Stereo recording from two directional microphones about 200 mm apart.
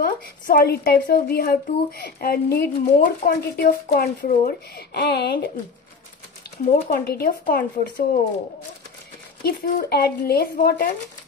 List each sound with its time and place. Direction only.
0.0 s a woman's voice: 50° left (ahead or behind)
6.9 s a woman's voice: 50° left (ahead or behind)
9.4 s a woman's voice: 50° left (ahead or behind)